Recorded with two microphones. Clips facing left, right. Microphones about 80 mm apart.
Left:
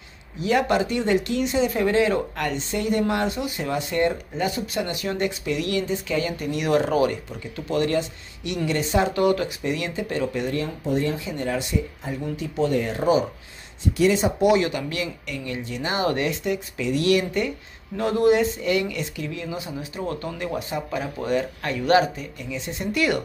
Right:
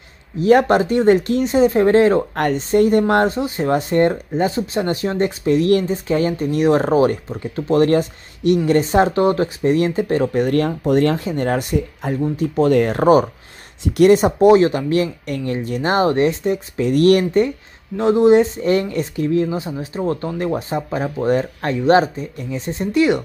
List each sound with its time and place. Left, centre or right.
0.4 s speech: right
11.1 s speech: right
12.7 s speech: right
14.4 s speech: right
16.9 s speech: right
17.9 s speech: right